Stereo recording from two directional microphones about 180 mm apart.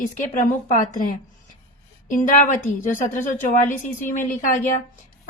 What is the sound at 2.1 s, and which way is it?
A woman's voice, 45° left (ahead or behind).